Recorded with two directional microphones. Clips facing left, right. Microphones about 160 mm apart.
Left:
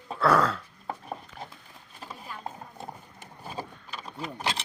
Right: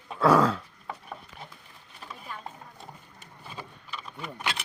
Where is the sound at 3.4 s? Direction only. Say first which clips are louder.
Left 5 dB; 40° left (ahead or behind).